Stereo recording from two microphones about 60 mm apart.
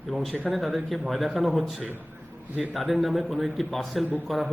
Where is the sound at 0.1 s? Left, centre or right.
Centre.